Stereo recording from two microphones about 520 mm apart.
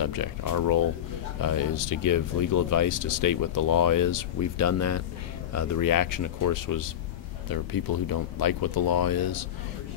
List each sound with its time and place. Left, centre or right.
0.0 s speech: left